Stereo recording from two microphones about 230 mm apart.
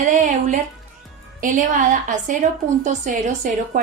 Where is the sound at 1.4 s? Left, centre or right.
Right.